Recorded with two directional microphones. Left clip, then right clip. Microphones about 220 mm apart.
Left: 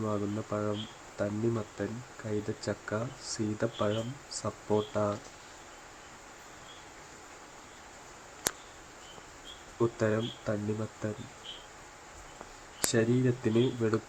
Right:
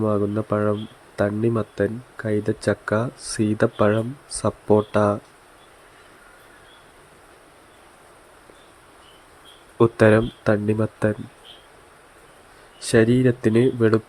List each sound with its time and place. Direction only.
0.0 s speech: 35° right (ahead or behind)
9.7 s speech: 40° right (ahead or behind)
12.9 s speech: 35° right (ahead or behind)